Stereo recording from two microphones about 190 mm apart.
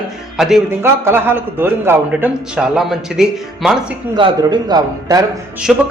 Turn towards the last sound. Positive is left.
turn(degrees=0)  # may be behind; listen again after turning